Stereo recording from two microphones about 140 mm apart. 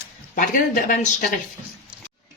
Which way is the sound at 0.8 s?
90° left.